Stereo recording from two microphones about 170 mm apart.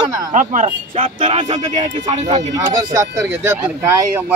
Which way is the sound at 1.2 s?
35° right (ahead or behind).